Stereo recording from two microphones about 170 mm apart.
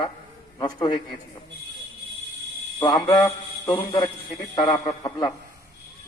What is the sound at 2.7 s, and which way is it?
Speech, 25° left (ahead or behind).